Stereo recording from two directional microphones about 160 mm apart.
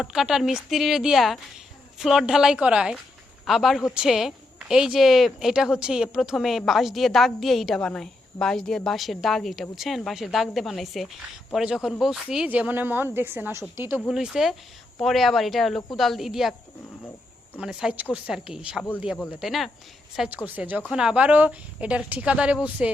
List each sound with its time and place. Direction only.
0.0 s a woman's voice: 5° right (ahead or behind)
14.1 s a woman's voice: 5° right (ahead or behind)
17.6 s a woman's voice: 5° right (ahead or behind)